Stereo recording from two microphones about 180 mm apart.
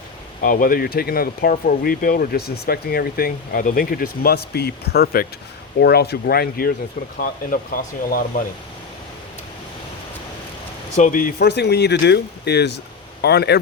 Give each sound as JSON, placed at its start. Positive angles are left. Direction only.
{"t": 0.4, "sound": "speech", "side_deg": 50}
{"t": 10.9, "sound": "speech", "side_deg": 45}